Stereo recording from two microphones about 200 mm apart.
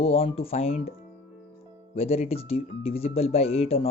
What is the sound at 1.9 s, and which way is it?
Speech, 30° left (ahead or behind).